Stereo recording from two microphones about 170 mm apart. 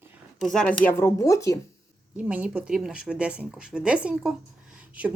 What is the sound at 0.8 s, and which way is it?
Speech, 15° left (ahead or behind).